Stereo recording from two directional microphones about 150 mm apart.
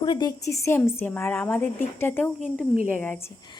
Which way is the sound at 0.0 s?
30° left (ahead or behind).